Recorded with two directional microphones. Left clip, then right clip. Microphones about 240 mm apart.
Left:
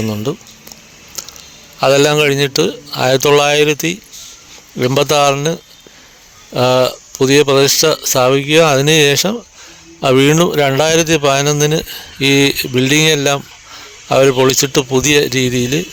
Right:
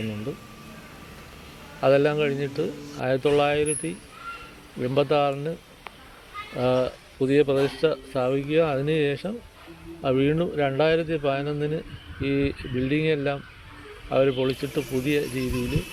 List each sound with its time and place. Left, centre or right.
0.3 s speech: left
1.8 s a man's voice: left
6.6 s a man's voice: left